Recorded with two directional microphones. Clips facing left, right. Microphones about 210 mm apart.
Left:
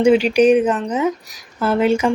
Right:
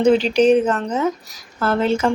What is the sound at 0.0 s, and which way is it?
Speech, 10° left (ahead or behind).